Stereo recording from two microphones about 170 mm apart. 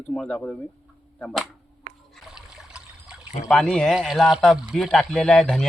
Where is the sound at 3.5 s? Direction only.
5° left (ahead or behind).